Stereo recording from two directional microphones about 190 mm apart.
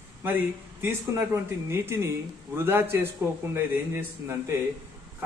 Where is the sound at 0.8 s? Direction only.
10° right (ahead or behind).